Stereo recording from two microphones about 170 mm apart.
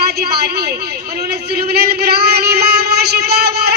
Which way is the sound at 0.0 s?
65° right (ahead or behind).